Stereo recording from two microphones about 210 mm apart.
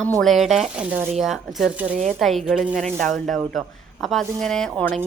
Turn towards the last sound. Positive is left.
turn(degrees=5)  # may be behind; listen again after turning